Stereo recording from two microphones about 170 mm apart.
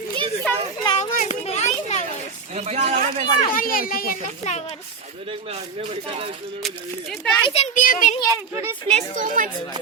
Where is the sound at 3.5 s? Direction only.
55° left (ahead or behind).